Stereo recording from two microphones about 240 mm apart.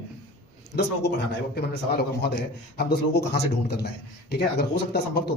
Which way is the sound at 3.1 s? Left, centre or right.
Left.